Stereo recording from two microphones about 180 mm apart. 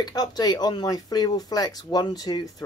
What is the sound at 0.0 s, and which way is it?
Speech, 20° left (ahead or behind).